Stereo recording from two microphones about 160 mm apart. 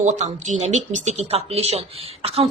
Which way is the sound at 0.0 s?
45° right (ahead or behind).